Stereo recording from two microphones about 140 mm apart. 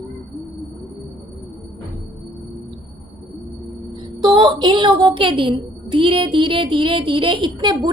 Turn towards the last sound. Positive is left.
turn(degrees=-30)  # may be behind; listen again after turning